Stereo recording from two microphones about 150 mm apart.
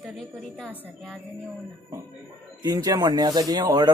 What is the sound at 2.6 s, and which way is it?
Speech, 25° right (ahead or behind).